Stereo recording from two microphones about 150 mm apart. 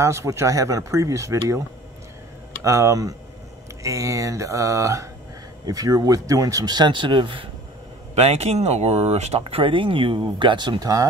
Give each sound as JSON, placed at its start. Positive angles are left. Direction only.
{"t": 0.0, "sound": "speech", "side_deg": -20}
{"t": 2.6, "sound": "speech", "side_deg": -20}
{"t": 8.1, "sound": "speech", "side_deg": -45}